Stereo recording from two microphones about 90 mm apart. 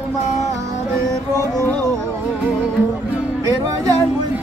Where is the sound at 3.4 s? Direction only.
40° right (ahead or behind).